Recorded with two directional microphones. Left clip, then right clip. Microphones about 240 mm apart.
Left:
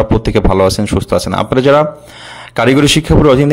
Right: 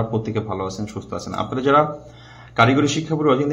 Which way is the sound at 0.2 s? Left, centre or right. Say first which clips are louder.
Left 15 dB; left.